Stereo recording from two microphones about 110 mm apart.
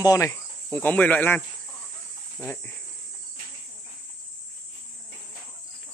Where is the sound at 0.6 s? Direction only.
15° left (ahead or behind).